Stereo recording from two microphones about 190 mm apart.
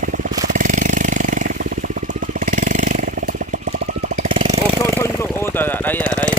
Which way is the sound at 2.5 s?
45° right (ahead or behind).